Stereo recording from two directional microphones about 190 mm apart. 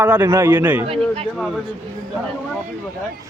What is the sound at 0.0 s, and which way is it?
Speech, 10° right (ahead or behind).